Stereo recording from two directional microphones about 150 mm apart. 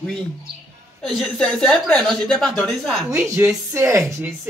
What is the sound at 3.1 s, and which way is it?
Speech, 15° right (ahead or behind).